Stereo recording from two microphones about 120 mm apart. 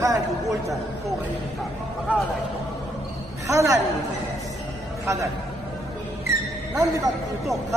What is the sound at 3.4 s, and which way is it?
Speech, 25° right (ahead or behind).